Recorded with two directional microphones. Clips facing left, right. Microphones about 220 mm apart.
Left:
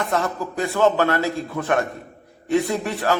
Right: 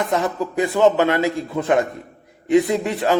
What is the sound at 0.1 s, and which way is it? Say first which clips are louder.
A man's voice: right 3 dB; 15° right (ahead or behind).